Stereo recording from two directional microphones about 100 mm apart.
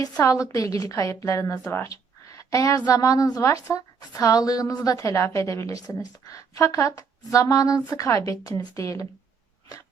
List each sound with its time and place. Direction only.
0.2 s a woman's voice: 30° left (ahead or behind)